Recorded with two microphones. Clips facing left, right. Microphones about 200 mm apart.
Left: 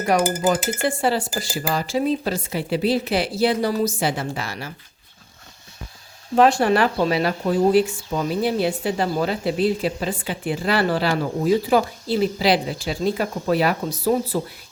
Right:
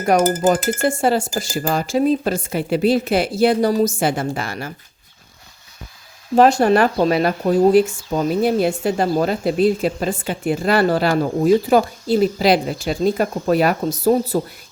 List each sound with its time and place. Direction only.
0.1 s speech: 45° right (ahead or behind)
6.3 s speech: 40° right (ahead or behind)